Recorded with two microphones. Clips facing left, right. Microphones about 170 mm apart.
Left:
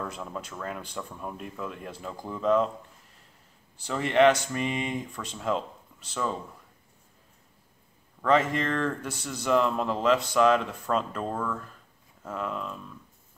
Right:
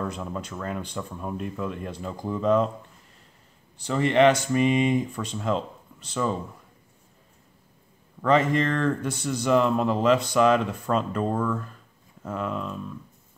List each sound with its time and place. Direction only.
0.0 s speech: centre (ahead or behind)
3.7 s speech: 5° left (ahead or behind)
4.6 s speech: 15° right (ahead or behind)
5.1 s speech: centre (ahead or behind)
8.2 s speech: centre (ahead or behind)